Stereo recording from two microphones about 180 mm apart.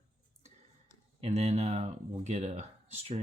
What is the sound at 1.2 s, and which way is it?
Speech, 35° right (ahead or behind).